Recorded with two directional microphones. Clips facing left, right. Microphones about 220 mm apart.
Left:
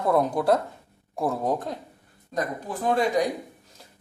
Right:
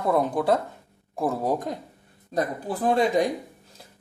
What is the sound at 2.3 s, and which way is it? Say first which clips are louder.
Speech: right 2 dB; 30° right (ahead or behind).